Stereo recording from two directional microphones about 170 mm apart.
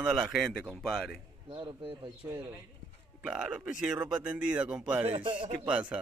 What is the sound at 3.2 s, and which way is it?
A man's voice, 5° right (ahead or behind).